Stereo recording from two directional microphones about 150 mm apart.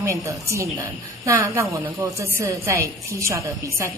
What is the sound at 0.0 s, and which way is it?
A woman's voice, 20° right (ahead or behind).